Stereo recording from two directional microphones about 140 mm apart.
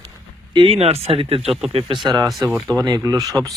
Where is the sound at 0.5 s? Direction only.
45° right (ahead or behind).